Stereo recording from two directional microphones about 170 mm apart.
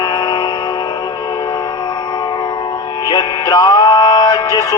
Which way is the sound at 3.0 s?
25° left (ahead or behind).